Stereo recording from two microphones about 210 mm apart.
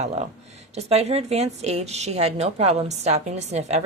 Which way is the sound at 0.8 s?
30° right (ahead or behind).